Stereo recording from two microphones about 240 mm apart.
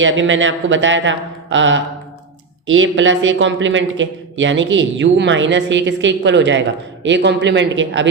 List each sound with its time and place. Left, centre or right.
0.0 s speech: right